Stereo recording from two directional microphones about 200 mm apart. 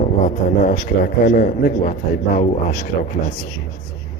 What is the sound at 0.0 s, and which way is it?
A man's voice, 40° left (ahead or behind).